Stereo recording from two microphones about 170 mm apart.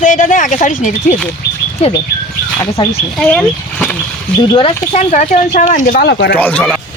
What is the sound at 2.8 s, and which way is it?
Speech, 25° left (ahead or behind).